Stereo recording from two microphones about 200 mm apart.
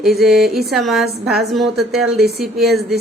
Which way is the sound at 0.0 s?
Centre (ahead or behind).